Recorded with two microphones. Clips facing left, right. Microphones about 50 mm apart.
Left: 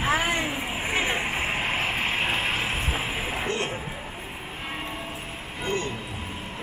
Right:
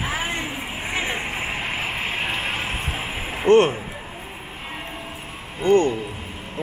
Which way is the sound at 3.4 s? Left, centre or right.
Right.